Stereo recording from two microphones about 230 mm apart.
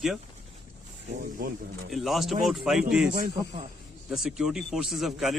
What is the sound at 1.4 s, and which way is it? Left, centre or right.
Speech, right.